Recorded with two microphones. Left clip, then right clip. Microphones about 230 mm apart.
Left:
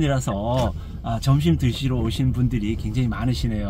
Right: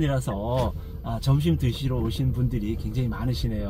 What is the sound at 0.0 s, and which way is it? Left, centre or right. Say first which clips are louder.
Speech: left 4 dB; centre.